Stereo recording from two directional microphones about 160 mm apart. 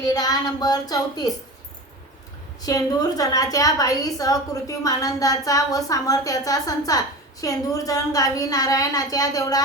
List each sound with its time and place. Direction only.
0.0 s a woman's voice: 25° left (ahead or behind)
2.6 s a woman's voice: 25° left (ahead or behind)